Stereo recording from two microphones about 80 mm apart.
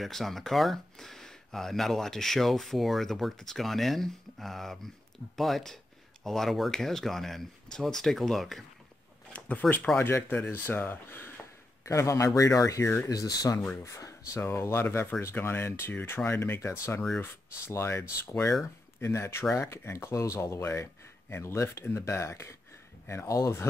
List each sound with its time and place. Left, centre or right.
0.0 s speech: centre
9.3 s speech: centre; by 13.6 s left
13.8 s speech: left